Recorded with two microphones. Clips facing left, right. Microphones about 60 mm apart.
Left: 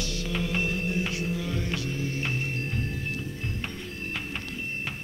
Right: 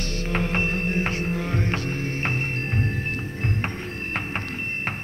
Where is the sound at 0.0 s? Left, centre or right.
Right.